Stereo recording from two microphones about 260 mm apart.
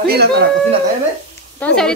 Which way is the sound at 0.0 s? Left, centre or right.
Right.